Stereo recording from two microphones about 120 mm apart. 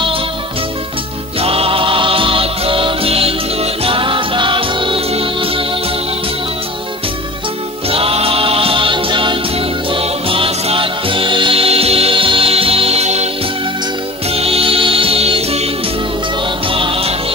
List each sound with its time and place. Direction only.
1.4 s music: 55° right (ahead or behind)
7.9 s choir: 55° right (ahead or behind)
9.8 s music: 50° right (ahead or behind)
14.3 s music: 55° right (ahead or behind)